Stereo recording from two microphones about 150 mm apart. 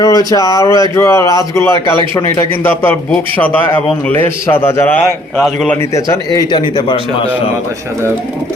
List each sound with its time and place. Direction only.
0.0 s a man's voice: 25° left (ahead or behind)